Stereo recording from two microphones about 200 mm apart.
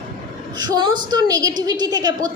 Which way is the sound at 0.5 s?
20° right (ahead or behind).